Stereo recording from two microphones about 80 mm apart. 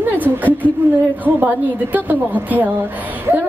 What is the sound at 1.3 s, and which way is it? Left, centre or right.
Speech, right.